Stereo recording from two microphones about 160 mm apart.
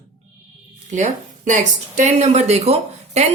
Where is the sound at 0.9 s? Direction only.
50° right (ahead or behind).